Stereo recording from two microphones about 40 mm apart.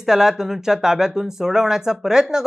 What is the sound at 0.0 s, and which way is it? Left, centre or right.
Speech, centre.